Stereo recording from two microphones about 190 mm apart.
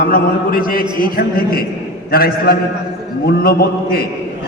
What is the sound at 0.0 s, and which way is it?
A man's voice, 50° left (ahead or behind).